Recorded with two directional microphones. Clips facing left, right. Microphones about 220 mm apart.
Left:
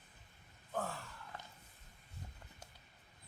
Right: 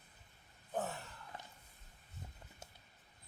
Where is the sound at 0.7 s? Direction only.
20° right (ahead or behind).